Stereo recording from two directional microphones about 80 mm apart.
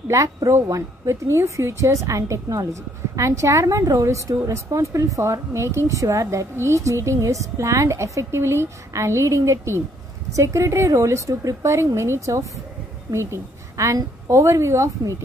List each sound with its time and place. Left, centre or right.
0.1 s a woman's voice: right